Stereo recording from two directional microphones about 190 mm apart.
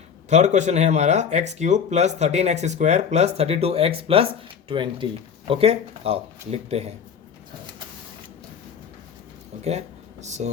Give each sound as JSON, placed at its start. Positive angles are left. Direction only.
{"t": 0.3, "sound": "speech", "side_deg": -40}
{"t": 9.6, "sound": "speech", "side_deg": -35}